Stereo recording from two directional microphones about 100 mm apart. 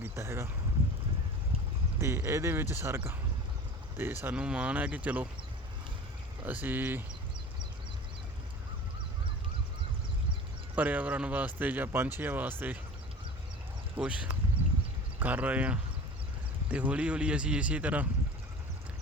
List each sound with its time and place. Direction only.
0.0 s speech: 25° right (ahead or behind)
2.0 s speech: 25° right (ahead or behind)
6.4 s speech: 20° right (ahead or behind)
10.8 s speech: 15° right (ahead or behind)
13.9 s speech: 10° right (ahead or behind)